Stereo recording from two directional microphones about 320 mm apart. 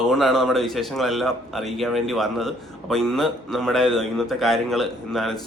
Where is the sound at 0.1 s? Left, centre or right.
Centre.